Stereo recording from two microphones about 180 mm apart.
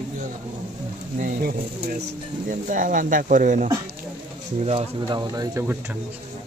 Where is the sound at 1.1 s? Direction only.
60° right (ahead or behind).